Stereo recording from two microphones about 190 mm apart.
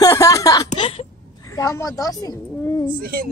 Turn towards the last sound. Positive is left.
turn(degrees=-50)  # may be behind; listen again after turning